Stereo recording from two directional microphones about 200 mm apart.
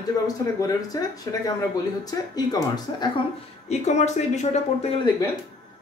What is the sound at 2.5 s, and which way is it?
Speech, 20° left (ahead or behind).